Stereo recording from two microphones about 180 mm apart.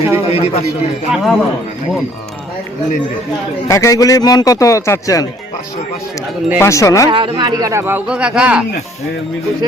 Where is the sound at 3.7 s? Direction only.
20° left (ahead or behind).